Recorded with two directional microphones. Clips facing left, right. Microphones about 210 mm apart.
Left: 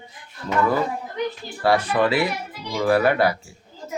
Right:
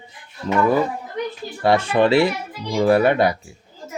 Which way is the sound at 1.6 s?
25° right (ahead or behind).